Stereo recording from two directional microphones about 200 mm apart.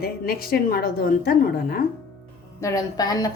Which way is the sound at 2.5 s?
15° left (ahead or behind).